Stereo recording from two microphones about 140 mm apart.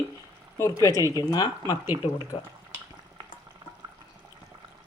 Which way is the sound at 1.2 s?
30° left (ahead or behind).